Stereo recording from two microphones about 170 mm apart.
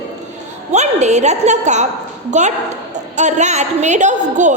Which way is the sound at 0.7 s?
40° right (ahead or behind).